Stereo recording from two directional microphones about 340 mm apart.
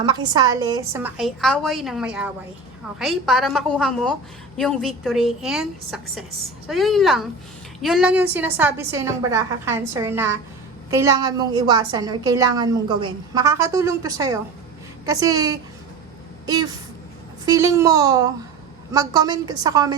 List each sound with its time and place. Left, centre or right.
0.0 s a woman's voice: centre
17.4 s a woman's voice: centre